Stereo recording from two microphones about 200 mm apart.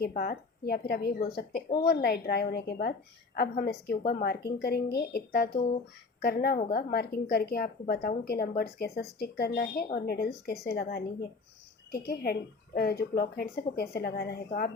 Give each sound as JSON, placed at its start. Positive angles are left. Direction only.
{"t": 0.0, "sound": "a woman's voice", "side_deg": 50}